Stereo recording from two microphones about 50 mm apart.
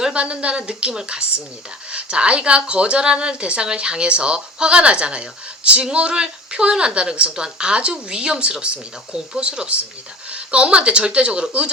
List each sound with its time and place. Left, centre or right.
0.0 s speech: right